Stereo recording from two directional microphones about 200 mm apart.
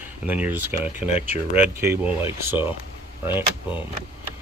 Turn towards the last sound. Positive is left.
turn(degrees=-10)  # may be behind; listen again after turning